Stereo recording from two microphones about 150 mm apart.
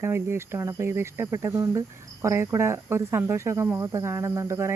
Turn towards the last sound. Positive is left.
turn(degrees=-20)  # may be behind; listen again after turning